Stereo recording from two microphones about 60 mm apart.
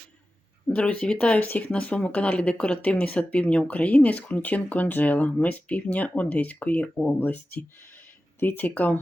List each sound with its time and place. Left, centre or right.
0.7 s speech: left